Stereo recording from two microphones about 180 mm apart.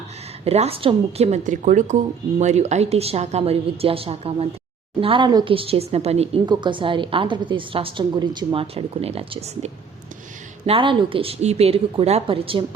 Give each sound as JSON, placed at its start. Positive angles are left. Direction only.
{"t": 0.4, "sound": "a woman's voice", "side_deg": -35}